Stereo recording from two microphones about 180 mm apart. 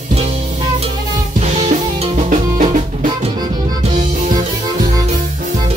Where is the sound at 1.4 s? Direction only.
35° right (ahead or behind).